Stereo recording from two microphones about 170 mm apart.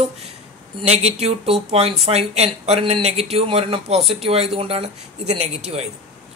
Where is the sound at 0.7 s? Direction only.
40° right (ahead or behind).